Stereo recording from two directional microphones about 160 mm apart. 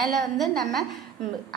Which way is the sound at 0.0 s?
Centre (ahead or behind).